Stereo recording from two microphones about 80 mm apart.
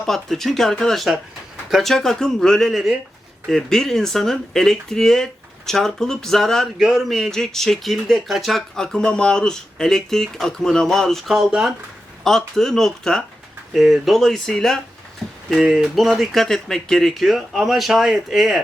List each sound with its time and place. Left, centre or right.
0.0 s speech: centre